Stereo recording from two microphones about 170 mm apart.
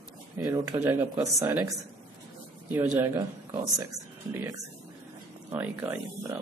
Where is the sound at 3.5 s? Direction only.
15° right (ahead or behind).